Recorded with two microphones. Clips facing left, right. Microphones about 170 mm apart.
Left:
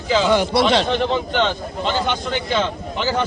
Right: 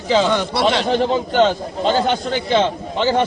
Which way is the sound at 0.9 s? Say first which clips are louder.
Right 3 dB; 35° right (ahead or behind).